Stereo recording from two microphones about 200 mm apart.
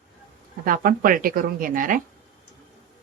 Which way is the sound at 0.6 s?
45° right (ahead or behind).